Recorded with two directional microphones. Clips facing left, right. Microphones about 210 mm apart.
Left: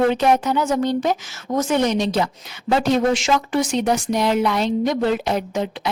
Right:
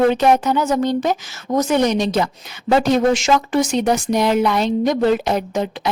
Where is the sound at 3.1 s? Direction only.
45° right (ahead or behind).